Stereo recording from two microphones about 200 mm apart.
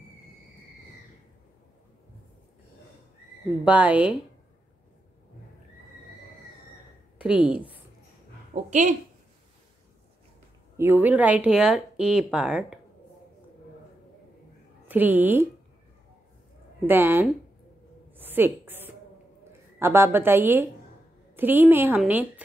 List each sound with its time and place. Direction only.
3.6 s a woman's voice: 5° right (ahead or behind)
7.2 s a woman's voice: 5° right (ahead or behind)
8.6 s speech: 35° right (ahead or behind)
10.8 s speech: 10° right (ahead or behind)
14.9 s a woman's voice: 10° right (ahead or behind)
16.8 s a woman's voice: 10° right (ahead or behind)
18.1 s a sound: 10° right (ahead or behind)
19.8 s a woman's voice: 10° right (ahead or behind)